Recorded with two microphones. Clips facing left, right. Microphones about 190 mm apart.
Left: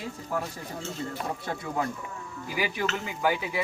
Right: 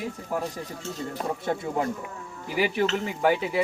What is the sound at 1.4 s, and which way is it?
Speech, 25° right (ahead or behind).